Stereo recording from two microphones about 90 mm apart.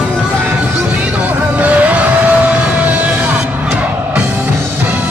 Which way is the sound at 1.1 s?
15° right (ahead or behind).